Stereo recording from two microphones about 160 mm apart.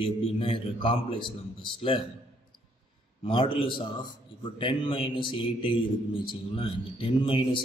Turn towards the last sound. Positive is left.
turn(degrees=30)  # may be behind; listen again after turning